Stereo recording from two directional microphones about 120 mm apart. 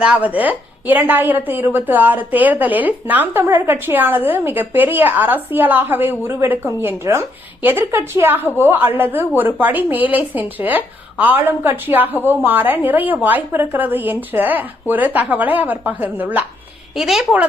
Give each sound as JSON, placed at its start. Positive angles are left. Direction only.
{"t": 0.0, "sound": "a woman's voice", "side_deg": -10}
{"t": 16.9, "sound": "a woman's voice", "side_deg": -5}